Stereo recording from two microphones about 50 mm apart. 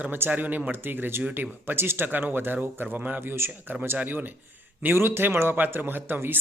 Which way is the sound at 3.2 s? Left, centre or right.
Right.